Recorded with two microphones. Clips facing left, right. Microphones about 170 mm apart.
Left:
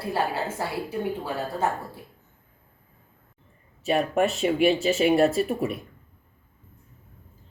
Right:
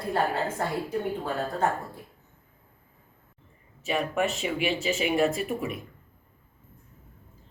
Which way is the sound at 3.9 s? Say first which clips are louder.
Left 4 dB; 40° left (ahead or behind).